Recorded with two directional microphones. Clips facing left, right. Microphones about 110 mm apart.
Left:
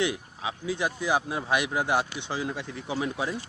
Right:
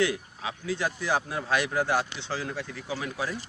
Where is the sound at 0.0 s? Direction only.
20° left (ahead or behind).